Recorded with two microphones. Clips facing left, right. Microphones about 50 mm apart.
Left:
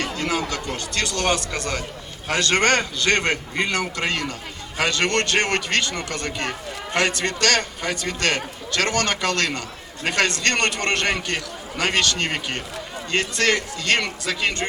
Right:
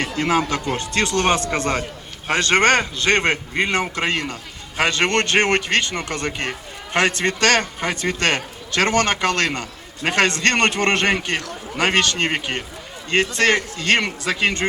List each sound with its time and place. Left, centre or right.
0.0 s a man's voice: right